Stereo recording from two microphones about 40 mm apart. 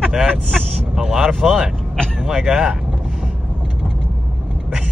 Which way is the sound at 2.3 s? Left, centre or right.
Right.